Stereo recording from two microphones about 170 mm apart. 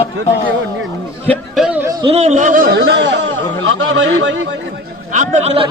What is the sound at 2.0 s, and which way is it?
Speech, 40° right (ahead or behind).